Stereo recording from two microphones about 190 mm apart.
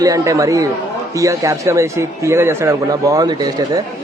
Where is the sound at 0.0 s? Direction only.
20° right (ahead or behind).